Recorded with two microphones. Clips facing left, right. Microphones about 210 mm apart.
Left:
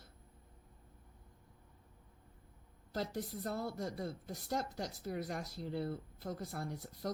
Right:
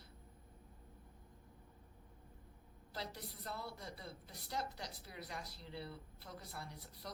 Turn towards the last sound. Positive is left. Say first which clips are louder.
# left 10 dB
turn(degrees=45)  # may be behind; listen again after turning